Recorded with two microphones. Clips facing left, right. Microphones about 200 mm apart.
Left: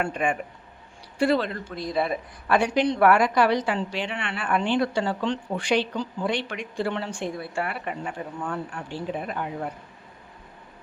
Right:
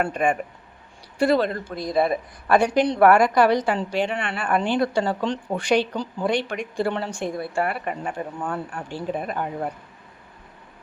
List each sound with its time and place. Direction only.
0.0 s a woman's voice: 45° right (ahead or behind)